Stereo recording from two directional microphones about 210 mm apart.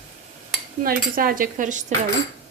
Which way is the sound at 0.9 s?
45° right (ahead or behind).